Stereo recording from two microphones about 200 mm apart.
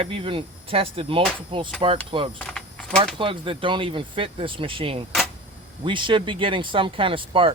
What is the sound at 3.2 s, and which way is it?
Speech, 25° right (ahead or behind).